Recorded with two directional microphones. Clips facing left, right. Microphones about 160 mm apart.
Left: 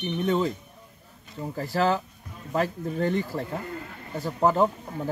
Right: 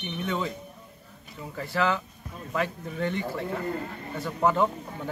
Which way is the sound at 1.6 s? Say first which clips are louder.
Left 2 dB; 40° left (ahead or behind).